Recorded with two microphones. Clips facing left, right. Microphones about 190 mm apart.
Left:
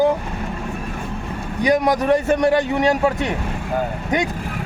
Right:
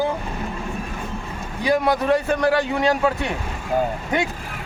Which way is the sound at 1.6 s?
15° left (ahead or behind).